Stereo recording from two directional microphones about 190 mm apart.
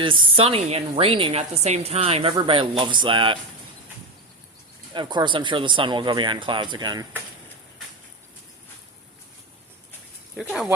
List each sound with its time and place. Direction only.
0.0 s a woman's voice: 30° right (ahead or behind)
4.9 s a woman's voice: 25° right (ahead or behind)